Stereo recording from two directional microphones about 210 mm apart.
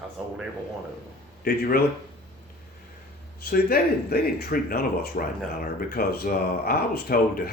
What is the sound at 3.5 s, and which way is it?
Speech, 45° left (ahead or behind).